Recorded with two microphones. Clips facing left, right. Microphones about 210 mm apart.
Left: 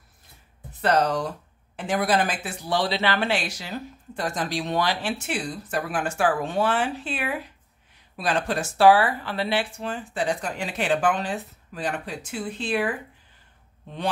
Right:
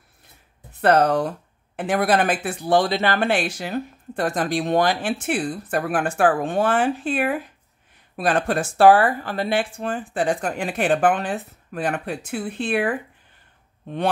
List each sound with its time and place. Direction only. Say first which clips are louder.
0.7 s speech: right 5 dB; 55° right (ahead or behind)